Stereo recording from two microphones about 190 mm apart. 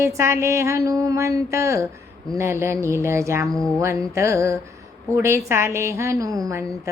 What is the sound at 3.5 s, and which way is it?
Speech, 5° left (ahead or behind).